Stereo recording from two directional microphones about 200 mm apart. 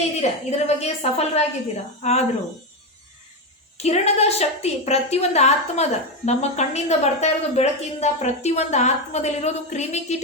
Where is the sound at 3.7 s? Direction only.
30° left (ahead or behind).